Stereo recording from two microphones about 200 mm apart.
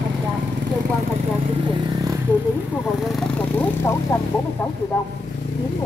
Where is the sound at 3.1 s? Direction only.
10° left (ahead or behind).